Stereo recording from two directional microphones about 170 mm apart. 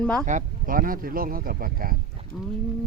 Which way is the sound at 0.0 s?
5° left (ahead or behind).